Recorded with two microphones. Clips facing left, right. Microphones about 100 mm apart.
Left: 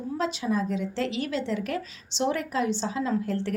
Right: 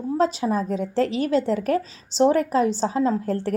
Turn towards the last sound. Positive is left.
turn(degrees=-40)  # may be behind; listen again after turning